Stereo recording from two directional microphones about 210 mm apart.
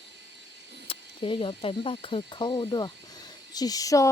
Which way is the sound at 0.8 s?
25° left (ahead or behind).